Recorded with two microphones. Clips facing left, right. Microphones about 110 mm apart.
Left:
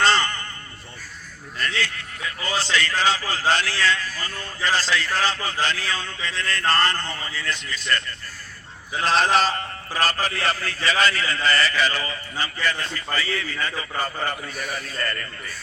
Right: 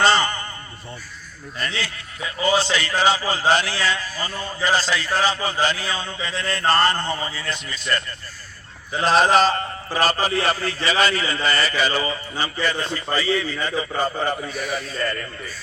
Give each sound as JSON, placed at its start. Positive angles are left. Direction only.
{"t": 0.0, "sound": "a sound", "side_deg": -15}
{"t": 1.6, "sound": "a man's voice", "side_deg": -15}
{"t": 9.9, "sound": "a man's voice", "side_deg": -15}